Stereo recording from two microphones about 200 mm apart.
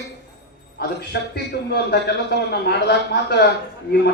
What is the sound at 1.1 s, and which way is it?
A man's voice, 55° left (ahead or behind).